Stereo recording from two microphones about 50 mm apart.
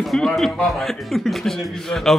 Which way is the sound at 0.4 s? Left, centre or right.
Centre.